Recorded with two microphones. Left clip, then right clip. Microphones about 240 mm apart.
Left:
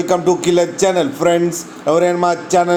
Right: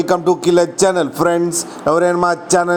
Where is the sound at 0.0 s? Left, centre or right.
Right.